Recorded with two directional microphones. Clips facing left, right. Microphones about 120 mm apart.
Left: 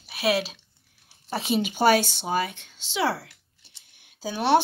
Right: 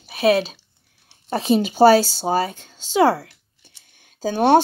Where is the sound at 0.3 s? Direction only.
40° right (ahead or behind).